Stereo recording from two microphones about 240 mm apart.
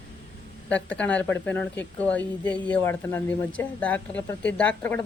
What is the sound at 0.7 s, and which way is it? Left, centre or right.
Speech, centre.